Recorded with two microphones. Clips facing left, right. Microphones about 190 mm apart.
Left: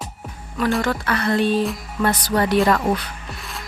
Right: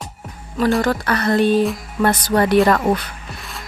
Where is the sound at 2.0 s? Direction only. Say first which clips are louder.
Right 3 dB; 55° right (ahead or behind).